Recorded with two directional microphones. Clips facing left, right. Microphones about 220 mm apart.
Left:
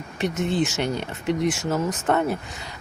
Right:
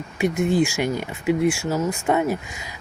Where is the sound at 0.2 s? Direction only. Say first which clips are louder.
Right 4 dB; 10° right (ahead or behind).